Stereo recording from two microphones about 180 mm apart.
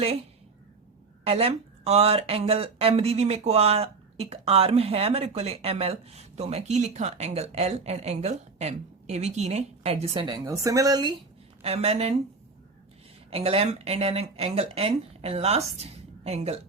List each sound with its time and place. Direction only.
1.2 s speech: 35° right (ahead or behind)
10.2 s speech: 20° right (ahead or behind)
11.6 s speech: 35° right (ahead or behind)
13.3 s speech: 35° right (ahead or behind)